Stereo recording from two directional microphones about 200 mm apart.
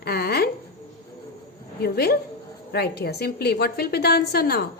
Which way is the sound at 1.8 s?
50° left (ahead or behind).